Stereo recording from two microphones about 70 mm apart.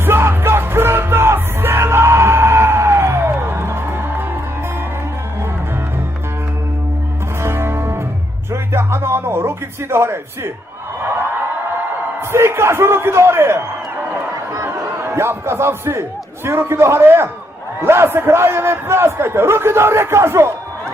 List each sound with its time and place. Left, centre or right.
0.0 s music: right
7.4 s music: right
8.7 s a sound: right
12.3 s a man's voice: right